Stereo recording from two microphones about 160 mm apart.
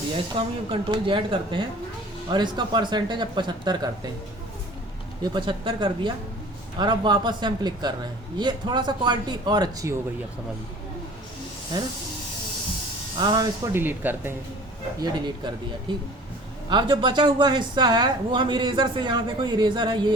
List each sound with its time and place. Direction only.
0.3 s speech: 30° right (ahead or behind)
5.2 s speech: 30° right (ahead or behind)
13.1 s speech: 25° right (ahead or behind)
13.7 s speech: 10° right (ahead or behind)
15.0 s speech: 25° right (ahead or behind)
16.6 s speech: 30° right (ahead or behind)